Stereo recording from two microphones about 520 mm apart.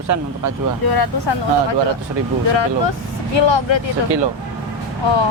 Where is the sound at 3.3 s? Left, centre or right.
Left.